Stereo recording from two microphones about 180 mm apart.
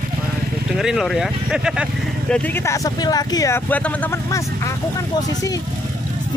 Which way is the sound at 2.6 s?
20° left (ahead or behind).